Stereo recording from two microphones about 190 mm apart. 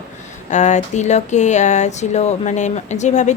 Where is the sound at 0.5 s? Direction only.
40° left (ahead or behind).